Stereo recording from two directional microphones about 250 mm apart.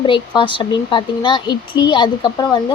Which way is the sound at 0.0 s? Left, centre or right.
Centre.